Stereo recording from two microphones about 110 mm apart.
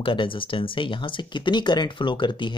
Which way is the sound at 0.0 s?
50° left (ahead or behind).